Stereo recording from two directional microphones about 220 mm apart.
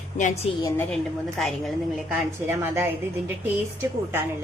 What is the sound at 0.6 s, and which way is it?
A woman's voice, 10° left (ahead or behind).